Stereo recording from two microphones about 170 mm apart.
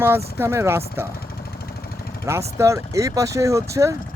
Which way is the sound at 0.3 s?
15° right (ahead or behind).